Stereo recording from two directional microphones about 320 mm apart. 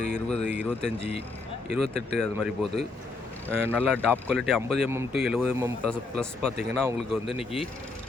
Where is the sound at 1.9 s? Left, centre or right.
Centre.